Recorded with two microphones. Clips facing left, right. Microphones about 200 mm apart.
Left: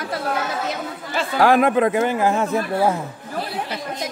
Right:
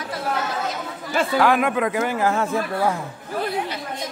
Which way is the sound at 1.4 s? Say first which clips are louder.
Left 6 dB; 35° left (ahead or behind).